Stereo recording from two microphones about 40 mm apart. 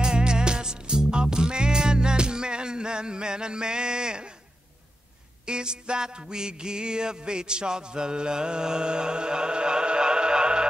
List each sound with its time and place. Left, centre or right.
0.0 s music: right
5.4 s music: right